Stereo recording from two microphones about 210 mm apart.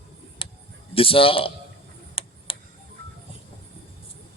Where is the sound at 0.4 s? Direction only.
25° left (ahead or behind).